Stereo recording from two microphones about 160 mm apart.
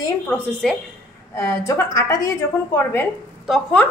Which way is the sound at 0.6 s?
5° left (ahead or behind).